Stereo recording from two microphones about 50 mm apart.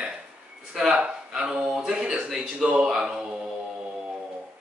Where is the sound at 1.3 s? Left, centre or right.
Centre.